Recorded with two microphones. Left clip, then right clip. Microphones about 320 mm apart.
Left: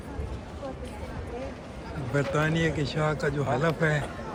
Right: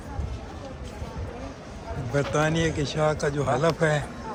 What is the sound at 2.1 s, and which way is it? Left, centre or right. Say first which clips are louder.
Speech: right 2 dB; centre.